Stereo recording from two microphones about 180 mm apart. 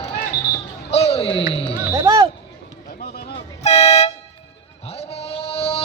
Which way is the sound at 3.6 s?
35° left (ahead or behind).